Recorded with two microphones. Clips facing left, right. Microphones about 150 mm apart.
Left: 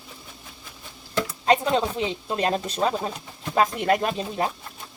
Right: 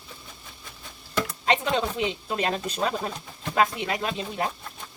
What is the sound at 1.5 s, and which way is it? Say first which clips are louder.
Speech: left 4 dB; 35° left (ahead or behind).